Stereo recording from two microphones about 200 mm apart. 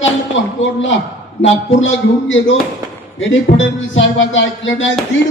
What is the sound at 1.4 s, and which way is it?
Speech, 75° left (ahead or behind).